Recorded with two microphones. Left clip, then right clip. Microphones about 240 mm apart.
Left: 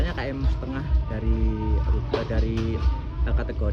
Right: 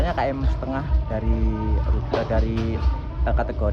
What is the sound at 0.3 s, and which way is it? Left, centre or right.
Speech, centre.